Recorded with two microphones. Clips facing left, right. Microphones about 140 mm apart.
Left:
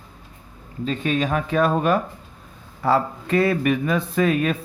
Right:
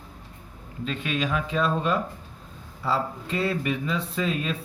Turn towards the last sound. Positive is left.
turn(degrees=65)  # may be behind; listen again after turning